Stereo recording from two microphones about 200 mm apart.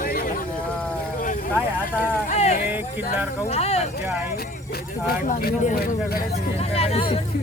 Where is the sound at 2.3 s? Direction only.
35° left (ahead or behind).